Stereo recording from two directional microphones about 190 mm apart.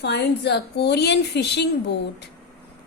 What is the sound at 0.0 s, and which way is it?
A woman's voice, 60° left (ahead or behind).